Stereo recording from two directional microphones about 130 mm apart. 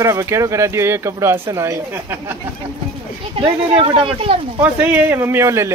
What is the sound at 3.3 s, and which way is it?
Speech, 40° right (ahead or behind).